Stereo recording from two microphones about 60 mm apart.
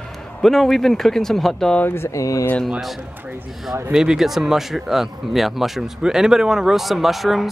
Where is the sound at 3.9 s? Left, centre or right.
Centre.